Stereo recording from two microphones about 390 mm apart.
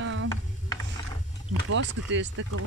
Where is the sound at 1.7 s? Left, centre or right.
Right.